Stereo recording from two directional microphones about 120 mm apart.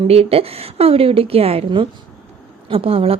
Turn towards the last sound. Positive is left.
turn(degrees=-50)  # may be behind; listen again after turning